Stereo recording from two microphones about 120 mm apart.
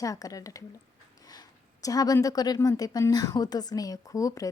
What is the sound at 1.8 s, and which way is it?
Speech, 30° left (ahead or behind).